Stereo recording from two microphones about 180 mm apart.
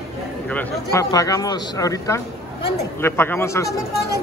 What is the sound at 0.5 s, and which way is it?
A man's voice, 15° left (ahead or behind).